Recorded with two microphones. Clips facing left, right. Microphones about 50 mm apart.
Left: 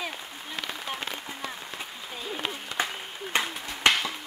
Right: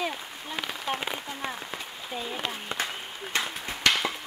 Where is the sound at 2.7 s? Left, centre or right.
Right.